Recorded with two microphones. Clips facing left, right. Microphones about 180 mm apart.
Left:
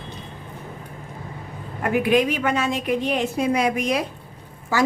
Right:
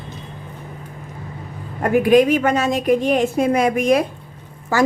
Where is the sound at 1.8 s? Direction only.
45° right (ahead or behind).